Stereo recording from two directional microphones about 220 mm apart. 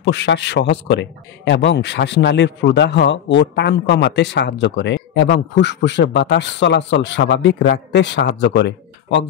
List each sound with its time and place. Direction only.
0.0 s a man's voice: 50° left (ahead or behind)